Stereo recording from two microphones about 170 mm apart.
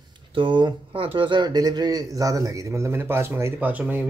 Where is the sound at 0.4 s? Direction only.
30° right (ahead or behind).